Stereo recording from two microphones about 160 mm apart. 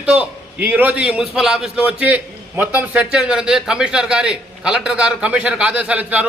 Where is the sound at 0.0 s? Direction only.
10° right (ahead or behind).